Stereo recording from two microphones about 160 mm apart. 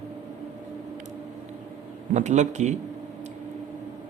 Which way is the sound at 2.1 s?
50° right (ahead or behind).